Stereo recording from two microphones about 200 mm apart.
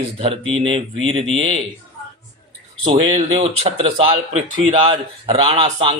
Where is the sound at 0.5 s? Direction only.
30° right (ahead or behind).